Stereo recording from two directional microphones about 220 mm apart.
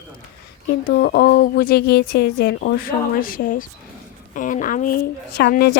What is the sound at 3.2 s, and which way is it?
Speech, 40° left (ahead or behind).